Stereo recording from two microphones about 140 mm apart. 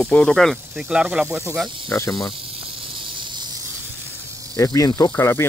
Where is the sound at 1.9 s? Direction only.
25° left (ahead or behind).